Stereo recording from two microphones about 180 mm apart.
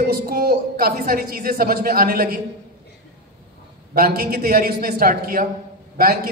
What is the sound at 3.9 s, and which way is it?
A man's voice, 55° right (ahead or behind).